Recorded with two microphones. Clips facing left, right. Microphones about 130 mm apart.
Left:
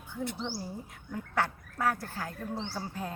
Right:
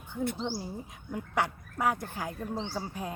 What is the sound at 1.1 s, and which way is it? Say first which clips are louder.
Speech: right 1 dB; 15° right (ahead or behind).